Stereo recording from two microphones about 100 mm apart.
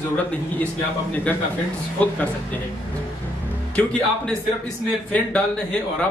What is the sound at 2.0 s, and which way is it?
Speech, 15° left (ahead or behind).